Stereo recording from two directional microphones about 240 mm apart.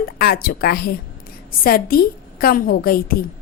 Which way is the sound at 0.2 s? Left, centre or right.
Left.